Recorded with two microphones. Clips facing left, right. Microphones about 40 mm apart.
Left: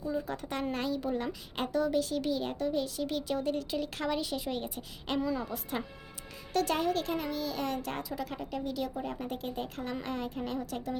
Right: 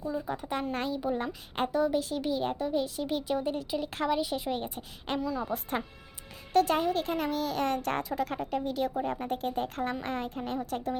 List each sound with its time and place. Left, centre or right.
0.3 s speech: centre
0.7 s speech: right
0.9 s speech: centre
1.2 s speech: right
7.2 s a child's voice: right